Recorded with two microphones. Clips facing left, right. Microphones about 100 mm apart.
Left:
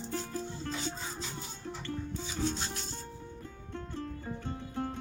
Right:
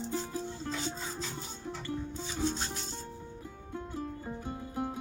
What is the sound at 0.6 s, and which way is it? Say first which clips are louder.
Music: right 1 dB; 30° right (ahead or behind).